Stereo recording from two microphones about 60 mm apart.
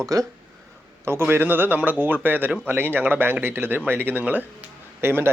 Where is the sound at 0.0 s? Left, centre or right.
Right.